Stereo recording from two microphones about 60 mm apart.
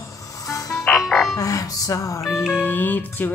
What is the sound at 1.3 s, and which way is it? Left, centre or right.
Music, left.